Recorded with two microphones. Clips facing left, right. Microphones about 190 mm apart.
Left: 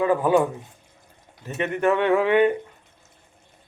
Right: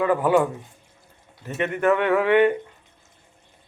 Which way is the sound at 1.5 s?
20° left (ahead or behind).